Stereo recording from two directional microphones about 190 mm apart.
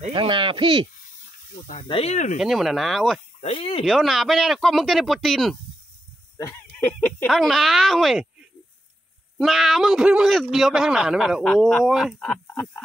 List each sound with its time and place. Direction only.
0.1 s speech: 25° right (ahead or behind)
1.7 s speech: 35° left (ahead or behind)
2.3 s a man's voice: centre (ahead or behind)
3.3 s speech: 35° left (ahead or behind)
3.8 s a man's voice: centre (ahead or behind)
6.3 s a man's voice: 15° left (ahead or behind)